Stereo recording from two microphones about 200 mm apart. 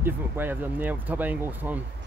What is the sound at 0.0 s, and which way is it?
Speech, 10° right (ahead or behind).